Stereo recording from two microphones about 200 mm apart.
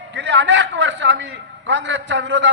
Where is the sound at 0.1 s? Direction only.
65° right (ahead or behind).